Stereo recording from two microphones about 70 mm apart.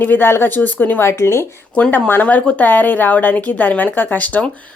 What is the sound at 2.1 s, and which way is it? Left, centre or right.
A woman's voice, left.